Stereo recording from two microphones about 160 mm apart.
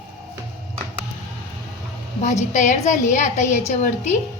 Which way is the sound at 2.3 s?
50° left (ahead or behind).